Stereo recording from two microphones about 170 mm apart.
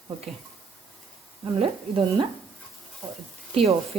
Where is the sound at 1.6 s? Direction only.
30° right (ahead or behind).